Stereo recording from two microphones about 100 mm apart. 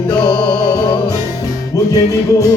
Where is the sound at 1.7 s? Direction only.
35° left (ahead or behind).